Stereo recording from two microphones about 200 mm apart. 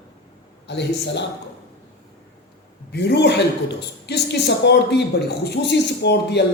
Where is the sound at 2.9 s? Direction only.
55° left (ahead or behind).